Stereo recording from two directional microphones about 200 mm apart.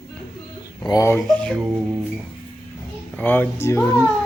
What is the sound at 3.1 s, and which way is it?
Speech, 10° left (ahead or behind).